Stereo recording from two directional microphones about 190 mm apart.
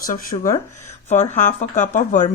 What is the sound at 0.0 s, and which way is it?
Speech, 45° left (ahead or behind).